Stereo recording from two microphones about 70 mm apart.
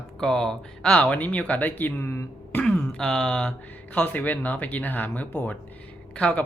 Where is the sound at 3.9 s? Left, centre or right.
Left.